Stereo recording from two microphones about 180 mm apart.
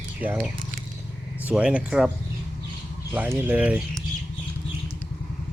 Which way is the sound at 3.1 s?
10° right (ahead or behind).